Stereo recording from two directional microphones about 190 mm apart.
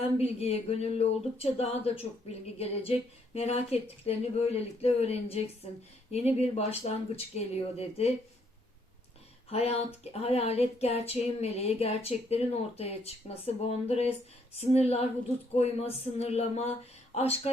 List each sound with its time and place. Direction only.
0.2 s speech: 30° left (ahead or behind)
9.5 s speech: 35° left (ahead or behind)